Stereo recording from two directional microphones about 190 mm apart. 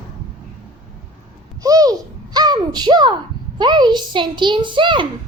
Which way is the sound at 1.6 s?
20° right (ahead or behind).